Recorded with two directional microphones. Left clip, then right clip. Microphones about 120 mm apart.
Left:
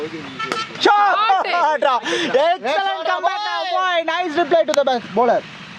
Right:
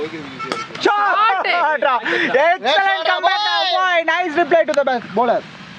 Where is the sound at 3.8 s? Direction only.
15° left (ahead or behind).